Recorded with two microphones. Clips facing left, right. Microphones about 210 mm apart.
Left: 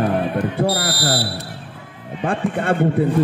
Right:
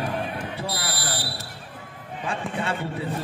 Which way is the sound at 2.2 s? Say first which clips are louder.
Left 8 dB; 55° left (ahead or behind).